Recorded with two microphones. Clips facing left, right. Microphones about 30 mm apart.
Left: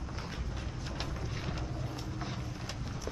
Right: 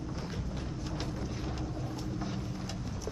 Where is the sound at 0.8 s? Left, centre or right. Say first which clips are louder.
Right 1 dB; left.